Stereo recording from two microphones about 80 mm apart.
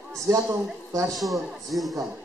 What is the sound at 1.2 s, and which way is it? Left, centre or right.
Speech, centre.